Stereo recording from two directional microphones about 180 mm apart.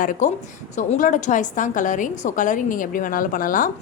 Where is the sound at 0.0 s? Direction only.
45° left (ahead or behind).